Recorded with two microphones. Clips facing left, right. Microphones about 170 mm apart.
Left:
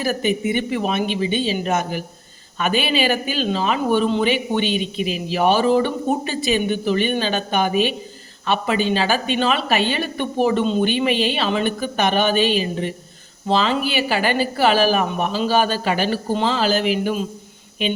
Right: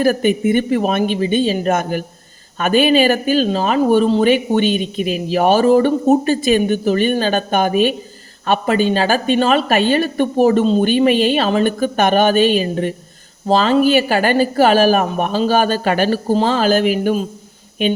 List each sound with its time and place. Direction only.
0.0 s speech: 50° right (ahead or behind)